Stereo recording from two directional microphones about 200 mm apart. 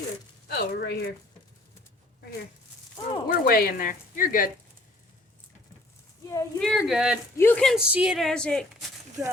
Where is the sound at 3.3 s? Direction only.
45° left (ahead or behind).